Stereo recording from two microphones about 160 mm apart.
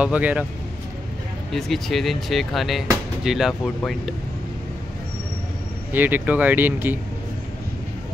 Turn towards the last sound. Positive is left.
turn(degrees=-10)  # may be behind; listen again after turning